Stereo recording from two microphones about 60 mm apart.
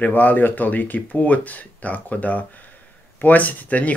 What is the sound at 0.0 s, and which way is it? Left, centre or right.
Speech, left.